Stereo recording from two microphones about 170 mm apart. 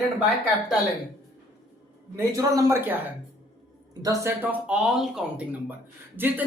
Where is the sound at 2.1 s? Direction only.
20° right (ahead or behind).